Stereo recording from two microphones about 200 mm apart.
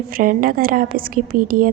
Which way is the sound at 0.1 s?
45° right (ahead or behind).